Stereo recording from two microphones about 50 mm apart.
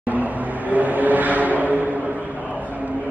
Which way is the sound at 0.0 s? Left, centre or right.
Right.